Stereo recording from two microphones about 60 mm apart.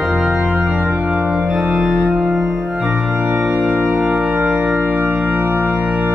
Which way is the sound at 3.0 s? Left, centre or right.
Right.